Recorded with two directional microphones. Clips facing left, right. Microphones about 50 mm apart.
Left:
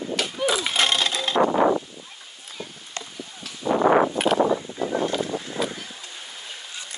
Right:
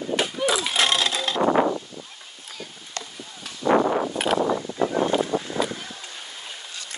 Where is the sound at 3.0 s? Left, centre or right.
Left.